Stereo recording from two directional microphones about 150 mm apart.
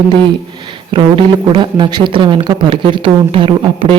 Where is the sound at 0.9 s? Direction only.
35° right (ahead or behind).